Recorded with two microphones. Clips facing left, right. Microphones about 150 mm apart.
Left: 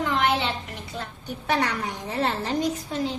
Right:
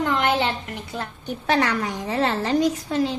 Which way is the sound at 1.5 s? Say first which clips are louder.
Right 4 dB; 85° right.